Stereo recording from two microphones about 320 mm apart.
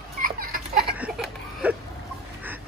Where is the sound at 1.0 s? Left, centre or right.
Centre.